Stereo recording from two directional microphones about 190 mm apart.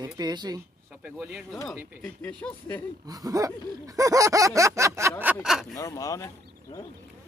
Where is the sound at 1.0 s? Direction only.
5° right (ahead or behind).